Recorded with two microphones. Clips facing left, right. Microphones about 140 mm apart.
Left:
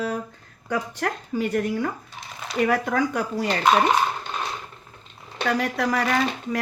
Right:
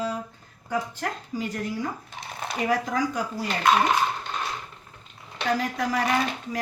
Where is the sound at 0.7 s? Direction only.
75° left (ahead or behind).